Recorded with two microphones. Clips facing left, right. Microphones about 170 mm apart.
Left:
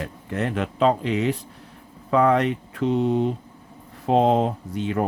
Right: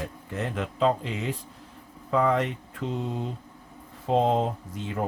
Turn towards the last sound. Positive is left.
turn(degrees=70)  # may be behind; listen again after turning